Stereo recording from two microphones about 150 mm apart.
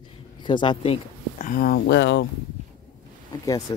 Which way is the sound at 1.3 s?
60° left (ahead or behind).